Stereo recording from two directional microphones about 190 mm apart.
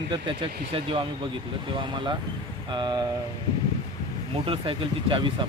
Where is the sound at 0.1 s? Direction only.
25° right (ahead or behind).